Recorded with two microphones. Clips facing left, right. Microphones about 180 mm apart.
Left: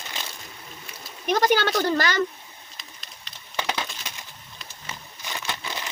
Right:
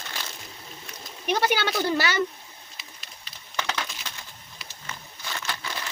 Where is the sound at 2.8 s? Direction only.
5° right (ahead or behind).